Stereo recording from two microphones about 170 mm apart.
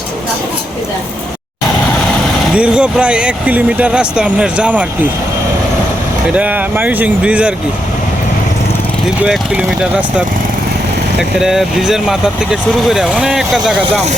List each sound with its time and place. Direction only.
2.6 s speech: 5° right (ahead or behind)
6.3 s speech: 10° right (ahead or behind)
9.2 s speech: 5° right (ahead or behind)
11.2 s speech: centre (ahead or behind)